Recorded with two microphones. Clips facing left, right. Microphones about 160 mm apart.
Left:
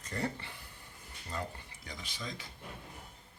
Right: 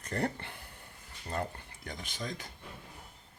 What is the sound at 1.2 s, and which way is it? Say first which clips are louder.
Speech: right 4 dB; 55° right (ahead or behind).